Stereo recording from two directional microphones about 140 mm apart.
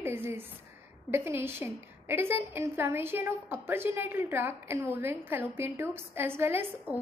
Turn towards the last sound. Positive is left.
turn(degrees=-15)  # may be behind; listen again after turning